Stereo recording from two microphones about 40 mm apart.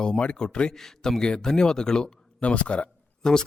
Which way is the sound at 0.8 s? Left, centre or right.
Centre.